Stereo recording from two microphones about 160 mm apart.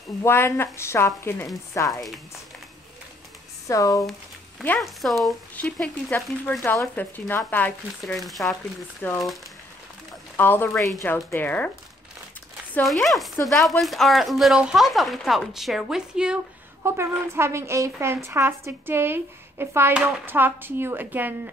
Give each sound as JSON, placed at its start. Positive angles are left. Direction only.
{"t": 0.2, "sound": "a woman's voice", "side_deg": 15}
{"t": 3.6, "sound": "speech", "side_deg": 20}
{"t": 4.7, "sound": "a woman's voice", "side_deg": 0}
{"t": 8.0, "sound": "speech", "side_deg": 0}
{"t": 9.0, "sound": "a woman's voice", "side_deg": 10}
{"t": 10.3, "sound": "a woman's voice", "side_deg": 15}
{"t": 12.8, "sound": "speech", "side_deg": 0}
{"t": 16.8, "sound": "a woman's voice", "side_deg": -15}